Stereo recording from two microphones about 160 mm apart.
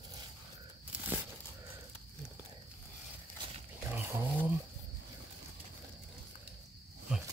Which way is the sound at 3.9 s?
15° right (ahead or behind).